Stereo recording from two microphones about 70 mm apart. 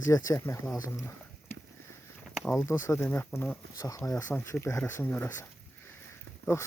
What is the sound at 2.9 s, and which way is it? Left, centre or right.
Speech, left.